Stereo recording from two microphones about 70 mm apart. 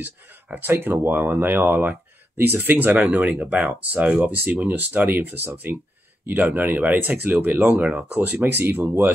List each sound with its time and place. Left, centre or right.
0.0 s speech: right